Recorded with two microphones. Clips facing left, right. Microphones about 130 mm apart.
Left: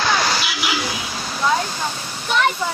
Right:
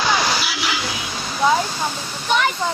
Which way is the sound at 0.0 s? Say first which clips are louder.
Even; centre (ahead or behind).